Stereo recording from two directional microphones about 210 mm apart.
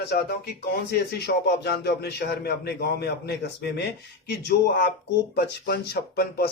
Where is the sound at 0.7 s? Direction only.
50° left (ahead or behind).